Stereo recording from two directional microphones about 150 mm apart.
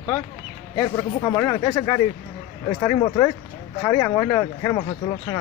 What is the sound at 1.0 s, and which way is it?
Speech, 25° left (ahead or behind).